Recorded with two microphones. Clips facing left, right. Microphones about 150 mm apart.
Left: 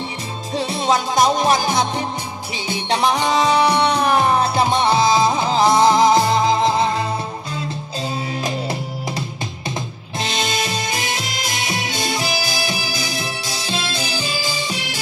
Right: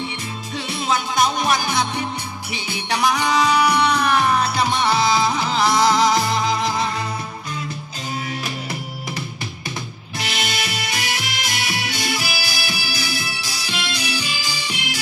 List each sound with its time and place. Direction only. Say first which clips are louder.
0.6 s music: left 5 dB; 30° left (ahead or behind)
10.2 s music: left 4 dB; 25° left (ahead or behind)